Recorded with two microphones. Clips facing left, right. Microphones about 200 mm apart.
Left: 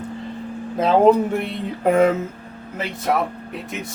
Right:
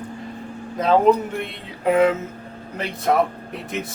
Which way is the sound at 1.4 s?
45° left (ahead or behind).